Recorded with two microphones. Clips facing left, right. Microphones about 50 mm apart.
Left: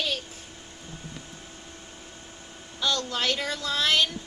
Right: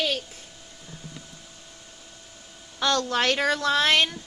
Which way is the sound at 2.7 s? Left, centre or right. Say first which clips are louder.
Right 4 dB; right.